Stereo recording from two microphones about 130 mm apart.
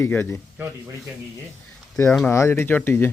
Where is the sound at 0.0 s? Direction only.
20° left (ahead or behind).